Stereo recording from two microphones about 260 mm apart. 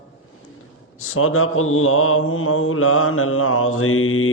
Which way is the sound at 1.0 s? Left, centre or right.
Left.